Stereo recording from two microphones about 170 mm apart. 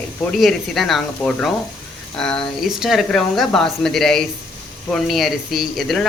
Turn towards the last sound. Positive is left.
turn(degrees=0)  # may be behind; listen again after turning